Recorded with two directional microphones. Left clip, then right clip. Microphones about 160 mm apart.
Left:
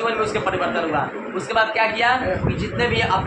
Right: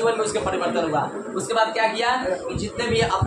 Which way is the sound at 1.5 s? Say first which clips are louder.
Left 2 dB; 20° left (ahead or behind).